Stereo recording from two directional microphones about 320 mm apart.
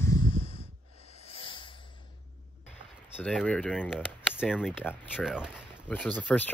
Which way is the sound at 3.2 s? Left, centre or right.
Centre.